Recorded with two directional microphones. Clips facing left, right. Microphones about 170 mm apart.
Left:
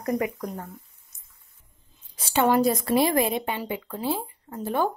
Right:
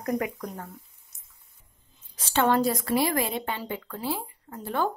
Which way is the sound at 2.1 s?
10° left (ahead or behind).